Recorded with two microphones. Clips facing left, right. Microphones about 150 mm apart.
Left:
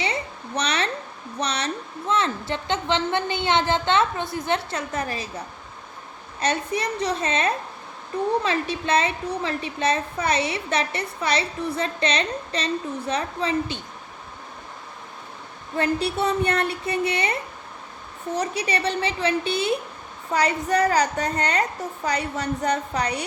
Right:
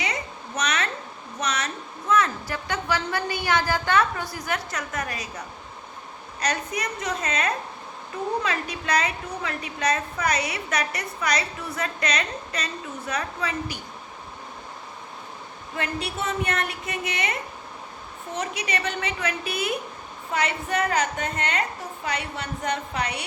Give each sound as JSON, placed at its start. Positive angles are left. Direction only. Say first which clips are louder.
{"t": 0.0, "sound": "a sound", "louder": "left 3 dB", "side_deg": 30}
{"t": 1.4, "sound": "a woman's voice", "louder": "left 2 dB", "side_deg": 30}
{"t": 6.4, "sound": "a woman's voice", "louder": "left 3 dB", "side_deg": 30}
{"t": 15.8, "sound": "a woman's voice", "louder": "left 7 dB", "side_deg": 35}
{"t": 18.3, "sound": "a woman's voice", "louder": "left 3 dB", "side_deg": 35}